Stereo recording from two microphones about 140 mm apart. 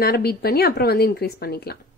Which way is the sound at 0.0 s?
90° left.